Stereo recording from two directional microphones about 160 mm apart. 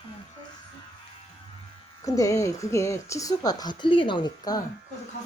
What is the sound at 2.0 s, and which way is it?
Speech, 20° left (ahead or behind).